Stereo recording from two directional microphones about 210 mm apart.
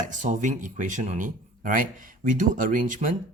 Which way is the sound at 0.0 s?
35° right (ahead or behind).